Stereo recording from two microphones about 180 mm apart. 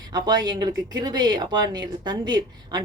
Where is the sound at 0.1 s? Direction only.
20° right (ahead or behind).